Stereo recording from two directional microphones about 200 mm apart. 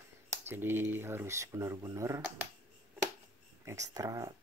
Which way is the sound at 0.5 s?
10° right (ahead or behind).